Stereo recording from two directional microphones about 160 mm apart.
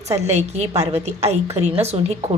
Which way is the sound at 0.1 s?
45° right (ahead or behind).